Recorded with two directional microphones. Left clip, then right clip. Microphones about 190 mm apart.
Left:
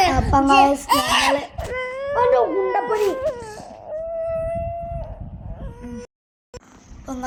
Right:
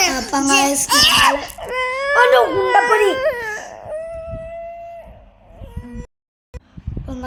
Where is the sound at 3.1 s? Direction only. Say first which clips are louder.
Right 5 dB; 45° right (ahead or behind).